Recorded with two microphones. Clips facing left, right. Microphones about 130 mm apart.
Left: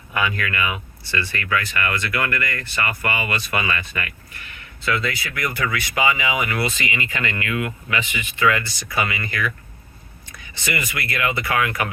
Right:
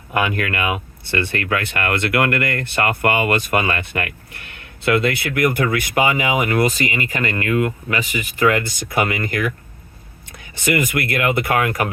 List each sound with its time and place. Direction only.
0.1 s speech: 55° right (ahead or behind)